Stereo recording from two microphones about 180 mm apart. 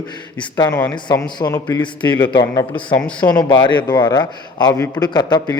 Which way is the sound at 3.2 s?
25° left (ahead or behind).